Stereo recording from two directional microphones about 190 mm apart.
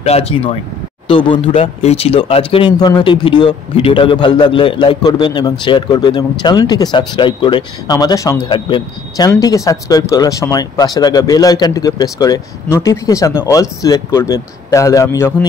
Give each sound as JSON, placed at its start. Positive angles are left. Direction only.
{"t": 0.0, "sound": "speech", "side_deg": 30}